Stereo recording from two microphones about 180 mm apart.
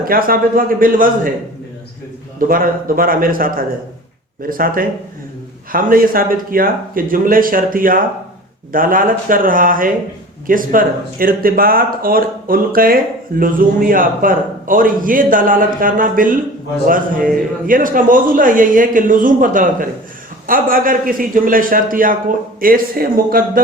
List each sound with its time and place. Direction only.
0.0 s speech: 55° right (ahead or behind)
2.4 s speech: 50° right (ahead or behind)